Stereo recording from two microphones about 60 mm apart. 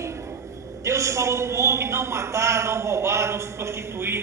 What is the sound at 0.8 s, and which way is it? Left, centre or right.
A man's voice, right.